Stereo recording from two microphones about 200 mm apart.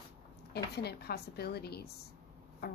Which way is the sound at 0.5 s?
55° left (ahead or behind).